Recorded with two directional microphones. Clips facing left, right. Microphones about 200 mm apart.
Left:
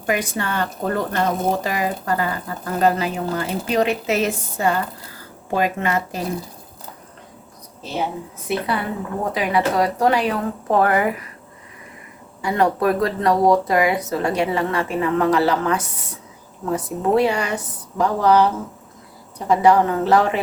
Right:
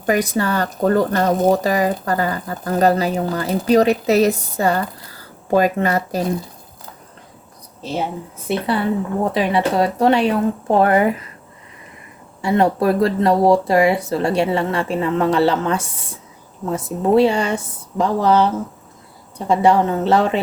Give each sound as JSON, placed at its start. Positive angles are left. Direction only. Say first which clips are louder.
{"t": 0.0, "sound": "speech", "louder": "right 5 dB", "side_deg": -35}
{"t": 8.4, "sound": "speech", "louder": "right 4 dB", "side_deg": -30}
{"t": 12.4, "sound": "speech", "louder": "right 3 dB", "side_deg": -25}
{"t": 19.5, "sound": "speech", "louder": "even", "side_deg": -25}